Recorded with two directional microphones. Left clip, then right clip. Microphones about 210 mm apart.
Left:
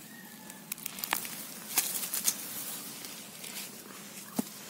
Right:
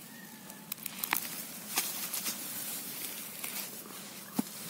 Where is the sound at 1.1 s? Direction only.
5° left (ahead or behind).